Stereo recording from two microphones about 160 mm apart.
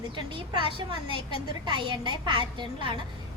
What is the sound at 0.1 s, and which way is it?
A woman's voice, 30° right (ahead or behind).